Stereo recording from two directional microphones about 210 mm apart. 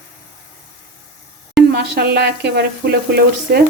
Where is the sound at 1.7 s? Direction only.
50° right (ahead or behind).